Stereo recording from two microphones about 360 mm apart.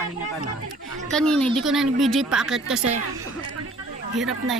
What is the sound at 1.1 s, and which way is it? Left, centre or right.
Speech, centre.